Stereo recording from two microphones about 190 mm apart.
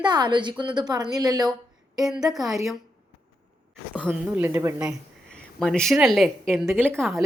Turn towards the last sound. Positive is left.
turn(degrees=0)  # may be behind; listen again after turning